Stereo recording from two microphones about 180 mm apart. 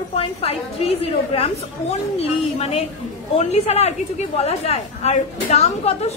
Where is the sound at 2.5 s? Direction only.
35° left (ahead or behind).